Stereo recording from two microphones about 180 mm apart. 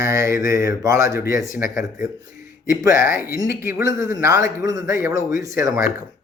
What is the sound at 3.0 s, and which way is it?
Speech, 50° left (ahead or behind).